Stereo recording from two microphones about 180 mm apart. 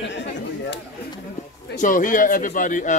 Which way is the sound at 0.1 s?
75° left (ahead or behind).